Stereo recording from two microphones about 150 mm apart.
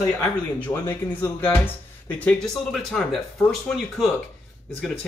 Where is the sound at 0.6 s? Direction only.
15° left (ahead or behind).